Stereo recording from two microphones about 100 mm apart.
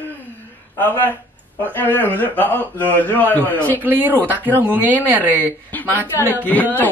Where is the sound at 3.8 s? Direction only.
20° right (ahead or behind).